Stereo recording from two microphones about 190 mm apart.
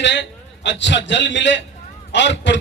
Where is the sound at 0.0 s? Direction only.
65° left (ahead or behind).